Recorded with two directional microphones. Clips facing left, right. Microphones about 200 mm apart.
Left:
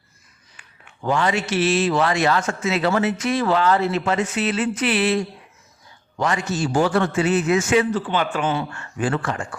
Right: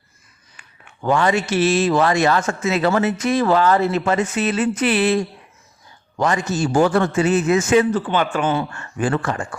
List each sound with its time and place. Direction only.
1.0 s a man's voice: 55° right (ahead or behind)